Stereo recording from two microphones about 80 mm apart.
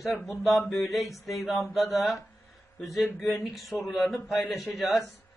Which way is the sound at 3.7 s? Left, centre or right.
Left.